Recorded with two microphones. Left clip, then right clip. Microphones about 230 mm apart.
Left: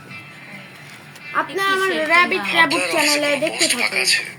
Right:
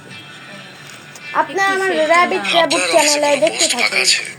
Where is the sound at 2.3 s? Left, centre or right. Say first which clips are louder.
Right 2 dB; centre.